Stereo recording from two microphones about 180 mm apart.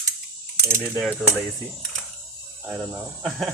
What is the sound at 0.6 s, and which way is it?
Mechanisms, 15° right (ahead or behind).